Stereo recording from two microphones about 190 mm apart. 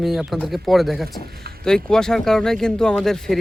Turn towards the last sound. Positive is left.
turn(degrees=0)  # may be behind; listen again after turning